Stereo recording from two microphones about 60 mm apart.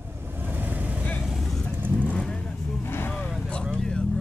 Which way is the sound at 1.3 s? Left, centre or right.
Centre.